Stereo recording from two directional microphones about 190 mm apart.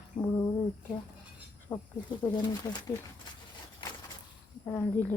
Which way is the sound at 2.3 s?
20° left (ahead or behind).